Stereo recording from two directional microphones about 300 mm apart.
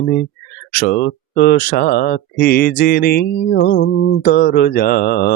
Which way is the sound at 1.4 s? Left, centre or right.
Left.